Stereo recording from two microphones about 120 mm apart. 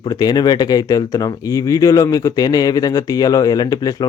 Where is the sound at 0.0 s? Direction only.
35° left (ahead or behind).